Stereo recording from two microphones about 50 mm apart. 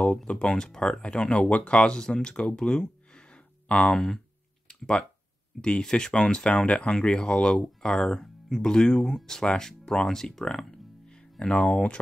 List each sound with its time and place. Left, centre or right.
0.2 s speech: centre
4.6 s a sound: centre
5.6 s speech: centre